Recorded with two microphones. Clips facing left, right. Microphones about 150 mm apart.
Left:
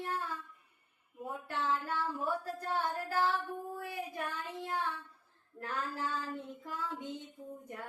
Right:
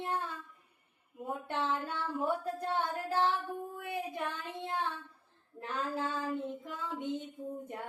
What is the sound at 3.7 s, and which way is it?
Child singing, 20° right (ahead or behind).